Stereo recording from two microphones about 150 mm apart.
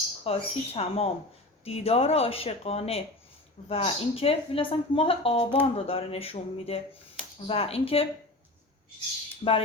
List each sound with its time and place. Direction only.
0.3 s speech: 40° left (ahead or behind)